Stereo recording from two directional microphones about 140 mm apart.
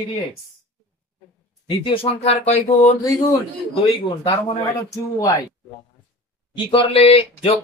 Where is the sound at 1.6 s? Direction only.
35° left (ahead or behind); by 2.9 s 50° left (ahead or behind).